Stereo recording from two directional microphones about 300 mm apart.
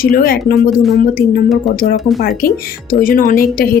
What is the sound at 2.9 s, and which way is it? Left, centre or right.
Speech, left.